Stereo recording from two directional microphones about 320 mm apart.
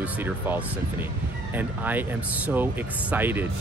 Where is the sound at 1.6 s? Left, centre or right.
Centre.